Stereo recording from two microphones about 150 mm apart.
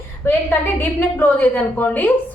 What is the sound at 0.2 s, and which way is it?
A woman's voice, 15° left (ahead or behind).